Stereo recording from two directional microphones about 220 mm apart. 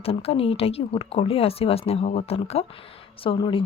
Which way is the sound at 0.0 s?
25° left (ahead or behind).